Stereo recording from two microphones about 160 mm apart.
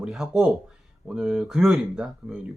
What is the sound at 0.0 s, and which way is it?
Speech, centre (ahead or behind).